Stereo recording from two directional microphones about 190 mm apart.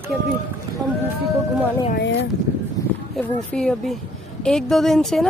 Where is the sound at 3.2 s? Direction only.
Centre (ahead or behind).